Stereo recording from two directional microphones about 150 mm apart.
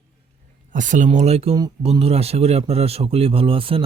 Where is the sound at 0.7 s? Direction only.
55° right (ahead or behind); by 3.8 s 35° right (ahead or behind).